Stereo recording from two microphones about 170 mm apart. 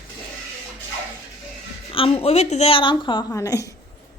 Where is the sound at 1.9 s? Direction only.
35° left (ahead or behind).